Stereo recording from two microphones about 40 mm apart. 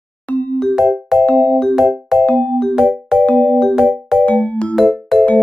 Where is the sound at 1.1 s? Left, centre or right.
Centre.